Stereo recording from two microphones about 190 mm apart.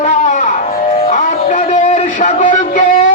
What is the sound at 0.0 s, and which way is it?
Music, 40° left (ahead or behind).